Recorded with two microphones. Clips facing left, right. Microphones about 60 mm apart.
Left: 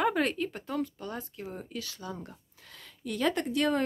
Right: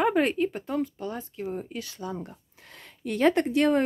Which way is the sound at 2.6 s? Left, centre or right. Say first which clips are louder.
Right 5 dB; right.